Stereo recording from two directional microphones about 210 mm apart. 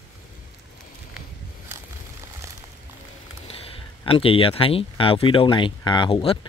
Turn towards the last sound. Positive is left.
turn(degrees=25)  # may be behind; listen again after turning